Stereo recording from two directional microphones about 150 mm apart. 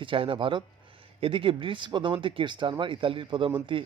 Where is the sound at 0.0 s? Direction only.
35° right (ahead or behind).